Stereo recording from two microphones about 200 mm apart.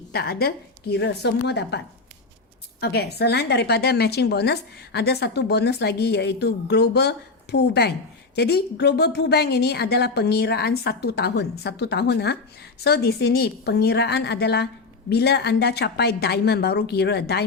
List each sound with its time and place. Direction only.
0.1 s a woman's voice: 50° left (ahead or behind)
2.8 s a woman's voice: 55° left (ahead or behind)